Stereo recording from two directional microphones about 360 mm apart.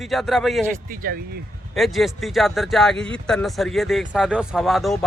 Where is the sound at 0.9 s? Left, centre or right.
Right.